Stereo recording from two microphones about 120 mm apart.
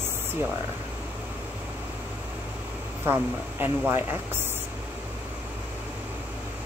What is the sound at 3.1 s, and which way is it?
Speech, 15° right (ahead or behind).